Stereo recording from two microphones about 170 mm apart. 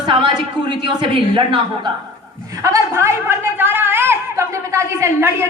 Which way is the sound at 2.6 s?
20° right (ahead or behind).